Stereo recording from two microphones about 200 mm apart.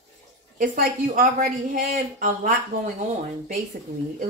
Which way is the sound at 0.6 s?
45° right (ahead or behind).